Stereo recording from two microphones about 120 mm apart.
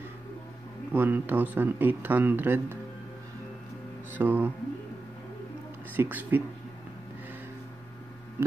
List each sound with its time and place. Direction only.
0.9 s speech: 15° right (ahead or behind)
4.1 s speech: 15° right (ahead or behind)
5.9 s speech: 15° right (ahead or behind)